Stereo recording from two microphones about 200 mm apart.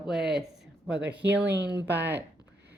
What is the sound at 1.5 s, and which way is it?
Speech, 60° right (ahead or behind).